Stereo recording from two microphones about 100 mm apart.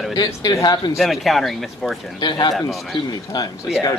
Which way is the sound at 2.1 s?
45° left (ahead or behind).